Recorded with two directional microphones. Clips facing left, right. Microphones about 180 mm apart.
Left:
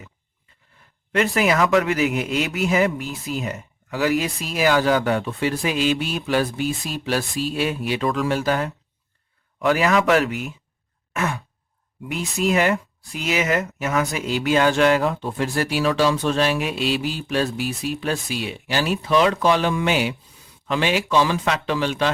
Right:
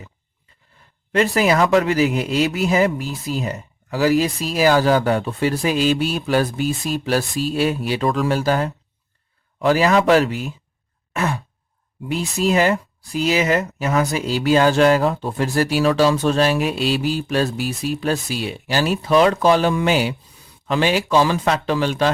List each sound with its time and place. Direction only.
1.1 s speech: 35° right (ahead or behind)
11.1 s sigh: 35° right (ahead or behind)
12.0 s speech: 35° right (ahead or behind)